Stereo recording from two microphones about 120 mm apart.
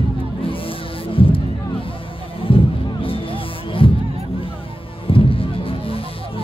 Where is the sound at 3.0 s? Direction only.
50° left (ahead or behind).